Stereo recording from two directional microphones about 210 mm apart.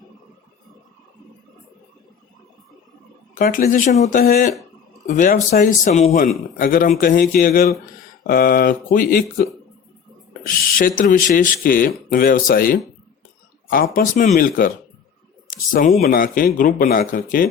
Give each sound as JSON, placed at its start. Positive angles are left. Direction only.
{"t": 3.3, "sound": "speech", "side_deg": 45}
{"t": 15.7, "sound": "speech", "side_deg": 40}